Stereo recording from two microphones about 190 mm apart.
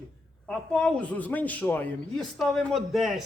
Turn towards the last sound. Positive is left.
turn(degrees=0)  # may be behind; listen again after turning